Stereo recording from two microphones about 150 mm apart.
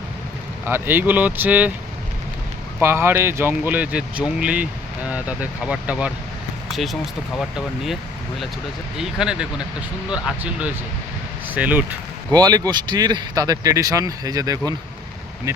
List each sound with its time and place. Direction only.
0.7 s speech: 15° right (ahead or behind)
2.8 s speech: 15° right (ahead or behind)
9.0 s speech: 5° right (ahead or behind)
12.3 s speech: 25° right (ahead or behind)